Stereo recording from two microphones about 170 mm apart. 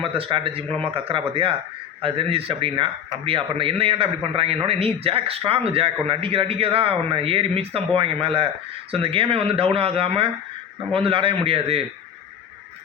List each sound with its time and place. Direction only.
0.0 s speech: 30° right (ahead or behind)